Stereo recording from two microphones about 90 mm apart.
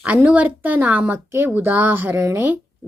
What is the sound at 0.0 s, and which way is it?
Speech, 20° right (ahead or behind).